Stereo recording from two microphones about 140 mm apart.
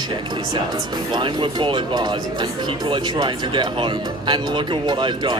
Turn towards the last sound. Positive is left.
turn(degrees=-35)  # may be behind; listen again after turning